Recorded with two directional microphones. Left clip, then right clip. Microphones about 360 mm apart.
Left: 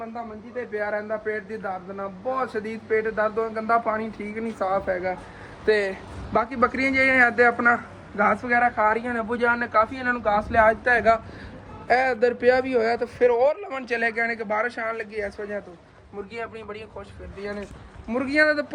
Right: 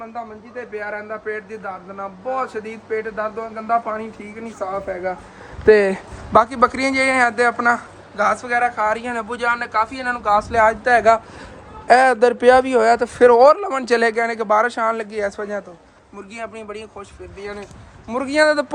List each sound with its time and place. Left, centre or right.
0.8 s a man's voice: centre
5.6 s a man's voice: right
13.2 s speech: right
16.3 s a man's voice: centre